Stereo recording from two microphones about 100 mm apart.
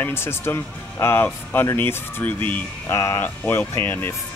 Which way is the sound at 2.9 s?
30° left (ahead or behind).